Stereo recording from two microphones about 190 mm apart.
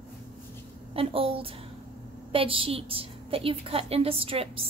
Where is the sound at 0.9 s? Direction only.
30° right (ahead or behind).